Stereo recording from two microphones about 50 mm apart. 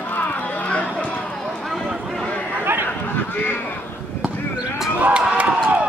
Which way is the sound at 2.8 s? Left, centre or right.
Left.